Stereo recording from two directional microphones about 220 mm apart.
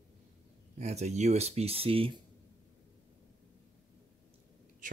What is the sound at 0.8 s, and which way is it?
Speech, 30° right (ahead or behind).